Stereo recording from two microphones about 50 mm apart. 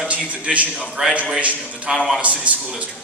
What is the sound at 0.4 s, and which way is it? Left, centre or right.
A man's voice, right.